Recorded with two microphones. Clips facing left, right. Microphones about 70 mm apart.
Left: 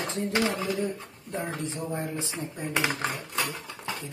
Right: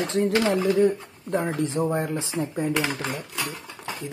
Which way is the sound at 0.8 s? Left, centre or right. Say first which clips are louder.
Right 10 dB; right.